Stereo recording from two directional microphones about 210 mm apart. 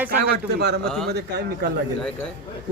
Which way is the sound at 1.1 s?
50° right (ahead or behind).